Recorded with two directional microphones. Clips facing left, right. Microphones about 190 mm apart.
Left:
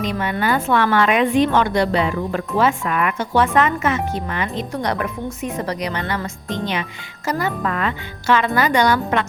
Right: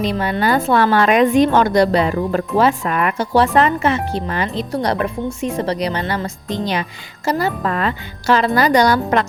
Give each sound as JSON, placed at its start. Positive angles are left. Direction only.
{"t": 0.0, "sound": "a woman's voice", "side_deg": -35}